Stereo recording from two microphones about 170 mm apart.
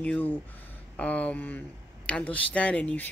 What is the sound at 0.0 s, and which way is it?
Speech, 10° left (ahead or behind).